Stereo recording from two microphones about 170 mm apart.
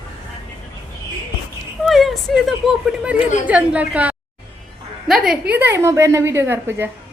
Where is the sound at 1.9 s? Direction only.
Centre (ahead or behind).